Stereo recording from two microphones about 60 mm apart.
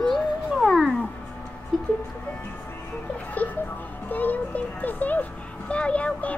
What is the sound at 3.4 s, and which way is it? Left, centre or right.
Speech, left.